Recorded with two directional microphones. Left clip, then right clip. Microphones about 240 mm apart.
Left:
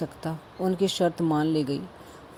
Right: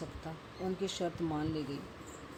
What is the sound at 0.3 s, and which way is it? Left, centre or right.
Speech, left.